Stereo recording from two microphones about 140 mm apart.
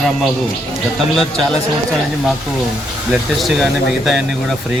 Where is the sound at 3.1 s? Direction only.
Centre (ahead or behind).